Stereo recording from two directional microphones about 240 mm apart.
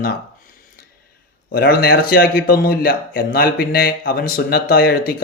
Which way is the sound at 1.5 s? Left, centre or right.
Left.